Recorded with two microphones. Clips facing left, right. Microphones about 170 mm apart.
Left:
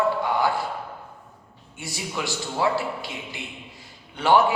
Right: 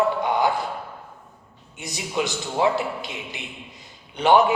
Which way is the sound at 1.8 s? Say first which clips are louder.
Right 4 dB; 20° right (ahead or behind).